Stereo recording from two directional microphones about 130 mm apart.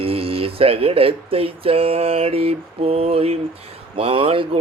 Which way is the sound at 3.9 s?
45° right (ahead or behind).